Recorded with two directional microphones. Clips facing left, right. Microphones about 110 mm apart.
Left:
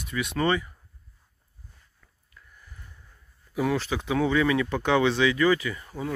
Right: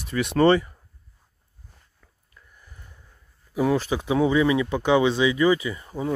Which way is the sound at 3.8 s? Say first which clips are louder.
Right 4 dB; 15° right (ahead or behind).